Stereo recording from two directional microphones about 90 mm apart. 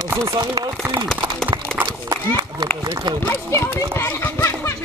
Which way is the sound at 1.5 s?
50° right (ahead or behind).